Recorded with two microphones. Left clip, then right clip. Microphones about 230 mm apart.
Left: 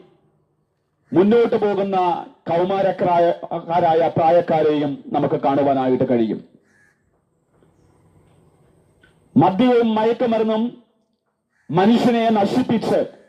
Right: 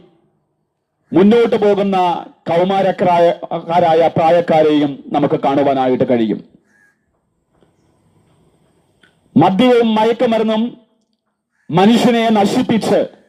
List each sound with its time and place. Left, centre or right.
1.1 s a man's voice: right
9.0 s a man's voice: right
11.7 s a man's voice: right